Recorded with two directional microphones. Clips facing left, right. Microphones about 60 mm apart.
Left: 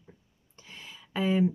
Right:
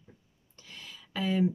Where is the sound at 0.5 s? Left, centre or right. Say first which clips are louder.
Left 1 dB; left.